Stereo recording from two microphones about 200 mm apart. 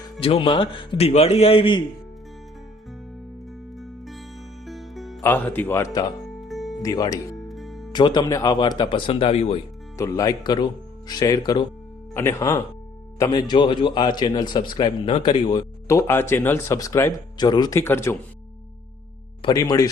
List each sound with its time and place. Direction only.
0.2 s speech: 30° left (ahead or behind)
3.8 s music: centre (ahead or behind)
5.2 s a man's voice: 10° left (ahead or behind)
6.2 s music: centre (ahead or behind)
6.8 s a man's voice: 20° left (ahead or behind)
7.4 s music: centre (ahead or behind)
7.9 s speech: 20° left (ahead or behind)
10.0 s a man's voice: 20° left (ahead or behind)
19.4 s speech: 20° left (ahead or behind)